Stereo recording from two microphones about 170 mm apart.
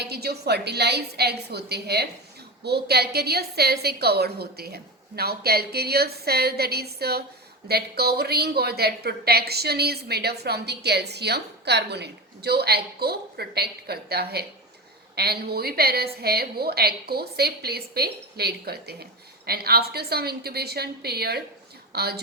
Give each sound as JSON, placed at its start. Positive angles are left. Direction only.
{"t": 0.0, "sound": "a woman's voice", "side_deg": -70}